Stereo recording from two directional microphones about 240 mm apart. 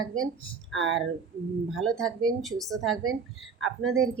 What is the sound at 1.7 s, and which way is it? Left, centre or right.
Speech, centre.